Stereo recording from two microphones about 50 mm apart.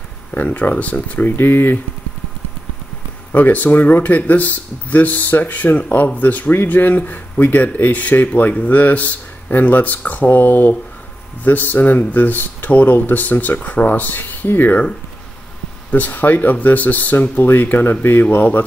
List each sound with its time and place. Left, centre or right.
0.3 s speech: left
1.3 s speech: left
3.3 s speech: left
15.9 s speech: left